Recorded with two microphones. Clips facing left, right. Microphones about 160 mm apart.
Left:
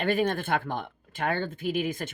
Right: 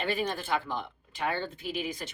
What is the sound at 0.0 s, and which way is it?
Speech, 50° left (ahead or behind).